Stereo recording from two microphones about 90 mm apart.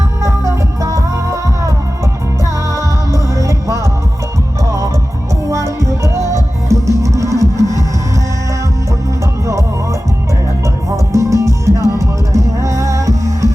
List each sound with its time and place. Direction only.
0.2 s music: 35° right (ahead or behind)
2.7 s music: 35° right (ahead or behind)
5.5 s music: 35° right (ahead or behind)
10.9 s music: 35° right (ahead or behind)